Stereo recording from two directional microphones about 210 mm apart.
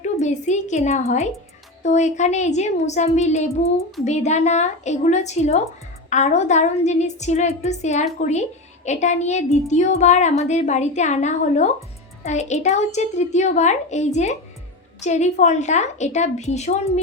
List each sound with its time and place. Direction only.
0.0 s a woman's voice: 35° left (ahead or behind)